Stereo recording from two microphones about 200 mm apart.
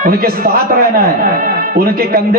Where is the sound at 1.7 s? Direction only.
50° right (ahead or behind).